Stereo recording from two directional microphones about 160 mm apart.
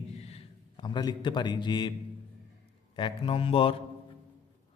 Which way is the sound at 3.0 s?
35° left (ahead or behind).